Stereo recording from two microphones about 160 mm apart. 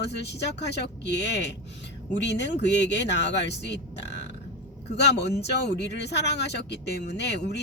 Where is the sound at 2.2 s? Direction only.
90° left.